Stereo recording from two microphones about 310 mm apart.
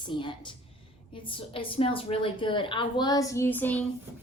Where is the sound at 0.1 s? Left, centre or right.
Centre.